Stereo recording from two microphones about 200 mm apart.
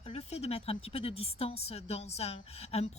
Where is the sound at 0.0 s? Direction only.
35° left (ahead or behind).